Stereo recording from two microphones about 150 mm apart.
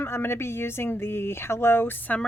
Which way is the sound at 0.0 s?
15° left (ahead or behind).